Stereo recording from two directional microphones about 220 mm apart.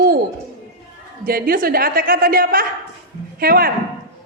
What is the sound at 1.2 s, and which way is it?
A woman's voice, 40° right (ahead or behind).